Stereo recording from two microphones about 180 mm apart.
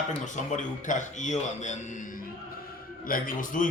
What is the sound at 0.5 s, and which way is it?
A man's voice, 45° left (ahead or behind).